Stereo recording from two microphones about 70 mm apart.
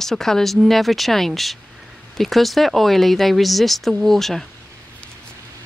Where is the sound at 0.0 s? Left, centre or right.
Centre.